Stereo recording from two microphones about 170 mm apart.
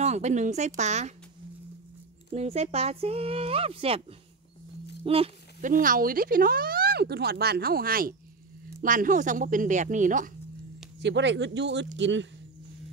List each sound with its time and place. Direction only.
0.0 s speech: 40° right (ahead or behind)
2.3 s speech: 40° right (ahead or behind)
5.0 s speech: 35° right (ahead or behind)
5.6 s speech: 50° right (ahead or behind)
11.0 s speech: 90° right